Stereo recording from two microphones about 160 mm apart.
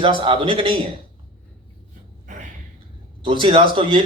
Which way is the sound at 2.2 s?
55° right (ahead or behind).